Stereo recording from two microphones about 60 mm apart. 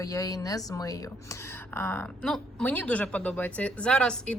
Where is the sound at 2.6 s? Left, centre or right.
Left.